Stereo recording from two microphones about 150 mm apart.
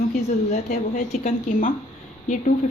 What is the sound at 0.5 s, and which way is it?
A woman's voice, 55° left (ahead or behind).